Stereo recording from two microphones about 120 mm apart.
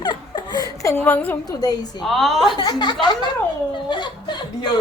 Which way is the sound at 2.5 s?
35° left (ahead or behind).